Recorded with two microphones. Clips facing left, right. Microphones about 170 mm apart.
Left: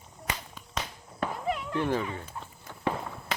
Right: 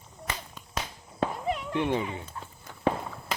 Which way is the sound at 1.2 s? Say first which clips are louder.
Right 2 dB; 20° right (ahead or behind).